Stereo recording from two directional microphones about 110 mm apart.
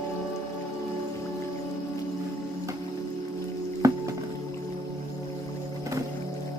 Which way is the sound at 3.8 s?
30° right (ahead or behind).